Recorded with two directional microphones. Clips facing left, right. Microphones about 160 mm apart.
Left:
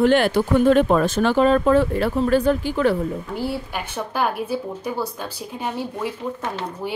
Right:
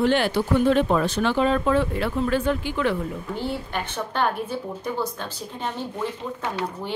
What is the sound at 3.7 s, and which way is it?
A woman's voice, 10° left (ahead or behind).